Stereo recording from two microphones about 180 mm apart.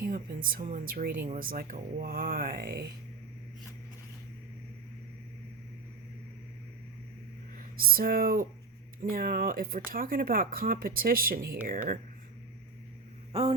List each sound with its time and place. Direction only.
0.0 s speech: 50° right (ahead or behind)
7.8 s speech: 55° right (ahead or behind)